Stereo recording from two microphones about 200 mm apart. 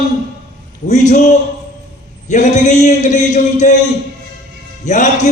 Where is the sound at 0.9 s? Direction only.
35° left (ahead or behind).